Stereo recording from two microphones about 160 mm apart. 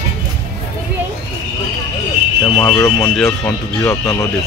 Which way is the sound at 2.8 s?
15° left (ahead or behind).